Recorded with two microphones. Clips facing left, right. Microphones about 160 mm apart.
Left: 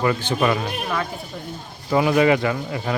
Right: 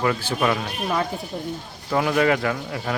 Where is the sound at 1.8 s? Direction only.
5° left (ahead or behind).